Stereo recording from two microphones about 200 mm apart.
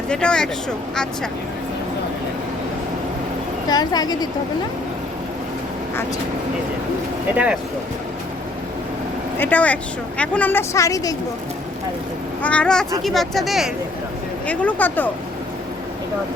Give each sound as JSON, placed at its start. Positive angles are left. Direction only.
{"t": 0.1, "sound": "speech", "side_deg": 5}
{"t": 3.7, "sound": "a woman's voice", "side_deg": 20}
{"t": 7.3, "sound": "speech", "side_deg": -5}
{"t": 9.4, "sound": "a woman's voice", "side_deg": 5}
{"t": 12.4, "sound": "a woman's voice", "side_deg": 5}